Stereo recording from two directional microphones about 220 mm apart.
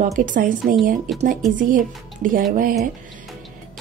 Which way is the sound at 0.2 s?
35° right (ahead or behind).